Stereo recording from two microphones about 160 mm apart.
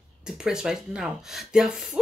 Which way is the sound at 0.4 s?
5° right (ahead or behind).